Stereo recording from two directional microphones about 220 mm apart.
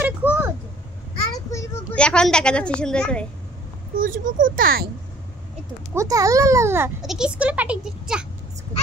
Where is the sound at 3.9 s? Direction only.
40° right (ahead or behind).